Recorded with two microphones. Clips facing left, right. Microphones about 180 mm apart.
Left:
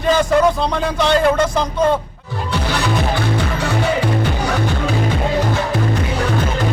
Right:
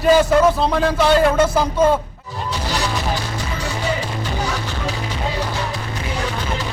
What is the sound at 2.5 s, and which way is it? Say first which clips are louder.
Music: left 4 dB; 60° left (ahead or behind).